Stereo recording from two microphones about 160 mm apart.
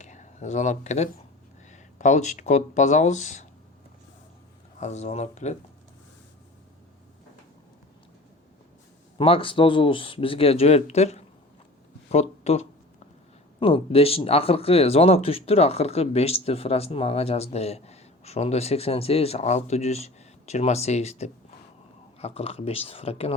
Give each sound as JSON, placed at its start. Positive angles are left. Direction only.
{"t": 0.0, "sound": "speech", "side_deg": 50}
{"t": 4.8, "sound": "speech", "side_deg": 45}
{"t": 9.1, "sound": "speech", "side_deg": 35}